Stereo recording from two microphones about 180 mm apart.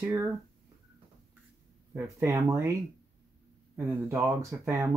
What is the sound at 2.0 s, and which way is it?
Speech, 15° right (ahead or behind).